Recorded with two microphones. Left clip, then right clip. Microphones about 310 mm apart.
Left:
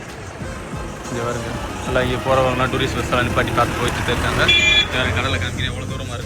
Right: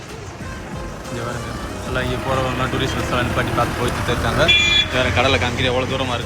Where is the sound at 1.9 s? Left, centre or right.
Centre.